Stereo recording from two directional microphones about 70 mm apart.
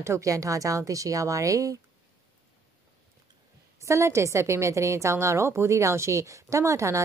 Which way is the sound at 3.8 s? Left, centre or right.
Right.